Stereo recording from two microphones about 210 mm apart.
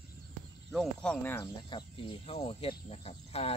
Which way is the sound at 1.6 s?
25° left (ahead or behind).